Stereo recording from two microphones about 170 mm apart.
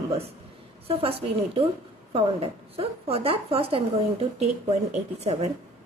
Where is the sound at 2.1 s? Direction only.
35° right (ahead or behind).